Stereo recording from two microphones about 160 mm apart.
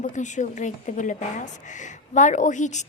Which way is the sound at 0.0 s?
50° left (ahead or behind).